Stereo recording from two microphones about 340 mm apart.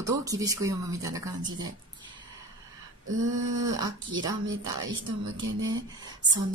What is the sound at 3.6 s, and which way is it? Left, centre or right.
Speech, centre.